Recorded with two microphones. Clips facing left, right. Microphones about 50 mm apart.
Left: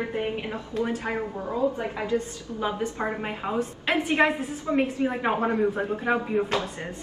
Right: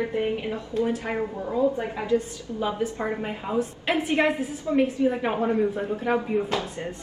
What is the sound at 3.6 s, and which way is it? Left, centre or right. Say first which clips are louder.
A woman's voice: right 2 dB; left.